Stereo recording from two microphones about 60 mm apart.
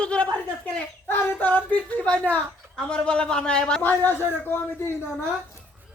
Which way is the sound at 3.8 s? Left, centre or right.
Left.